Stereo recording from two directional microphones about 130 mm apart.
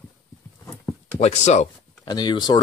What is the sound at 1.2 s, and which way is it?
Speech, 60° left (ahead or behind).